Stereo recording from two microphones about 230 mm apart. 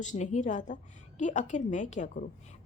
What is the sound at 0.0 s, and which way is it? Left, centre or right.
A woman's voice, left.